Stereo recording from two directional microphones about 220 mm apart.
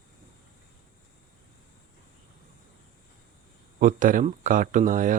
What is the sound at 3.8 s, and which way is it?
Speech, 40° right (ahead or behind).